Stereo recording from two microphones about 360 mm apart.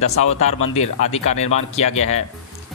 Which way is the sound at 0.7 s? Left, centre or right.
Centre.